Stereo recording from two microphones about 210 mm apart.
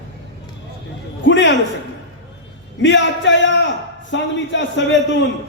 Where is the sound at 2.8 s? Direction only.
60° left (ahead or behind).